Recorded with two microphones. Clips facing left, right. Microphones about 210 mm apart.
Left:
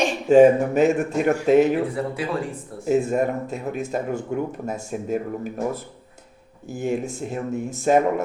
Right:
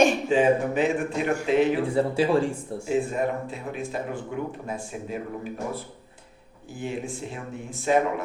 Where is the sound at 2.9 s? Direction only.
45° left (ahead or behind).